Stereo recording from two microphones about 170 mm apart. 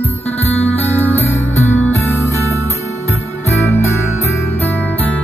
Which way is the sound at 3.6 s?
15° left (ahead or behind).